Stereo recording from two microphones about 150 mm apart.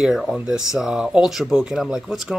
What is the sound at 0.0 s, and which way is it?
Speech, centre (ahead or behind).